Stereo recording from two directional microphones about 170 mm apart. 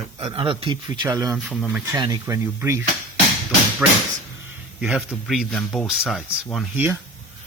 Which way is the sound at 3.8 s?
10° right (ahead or behind).